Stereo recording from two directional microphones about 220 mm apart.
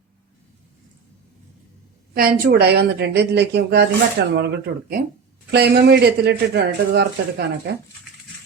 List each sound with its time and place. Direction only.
2.1 s speech: 45° right (ahead or behind)